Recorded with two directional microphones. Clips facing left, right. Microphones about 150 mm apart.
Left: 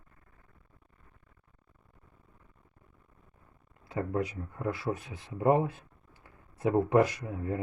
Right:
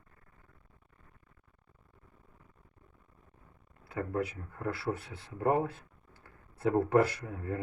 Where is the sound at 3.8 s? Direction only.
20° left (ahead or behind).